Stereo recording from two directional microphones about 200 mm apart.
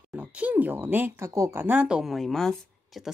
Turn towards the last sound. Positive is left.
turn(degrees=0)  # may be behind; listen again after turning